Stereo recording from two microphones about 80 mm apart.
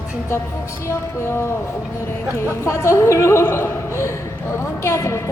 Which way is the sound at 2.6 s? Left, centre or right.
Left.